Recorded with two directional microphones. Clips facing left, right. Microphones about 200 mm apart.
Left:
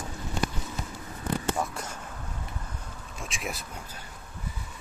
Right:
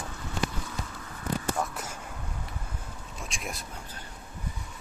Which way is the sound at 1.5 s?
Centre (ahead or behind).